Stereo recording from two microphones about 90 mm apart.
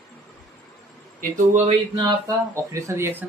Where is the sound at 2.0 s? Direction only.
45° right (ahead or behind).